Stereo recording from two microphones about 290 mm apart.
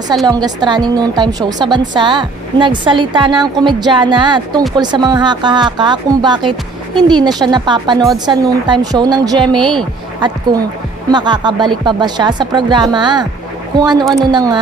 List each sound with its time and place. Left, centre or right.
0.3 s a woman's voice: centre
11.1 s a woman's voice: centre